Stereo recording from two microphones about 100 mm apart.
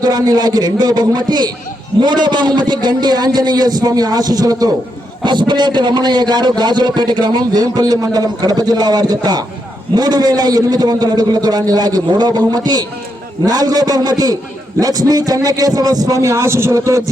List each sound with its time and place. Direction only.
0.0 s a man's voice: 40° right (ahead or behind)
5.2 s a man's voice: 50° right (ahead or behind); by 17.0 s 30° right (ahead or behind)